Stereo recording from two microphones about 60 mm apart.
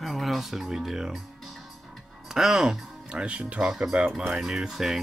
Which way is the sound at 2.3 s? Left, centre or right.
Centre.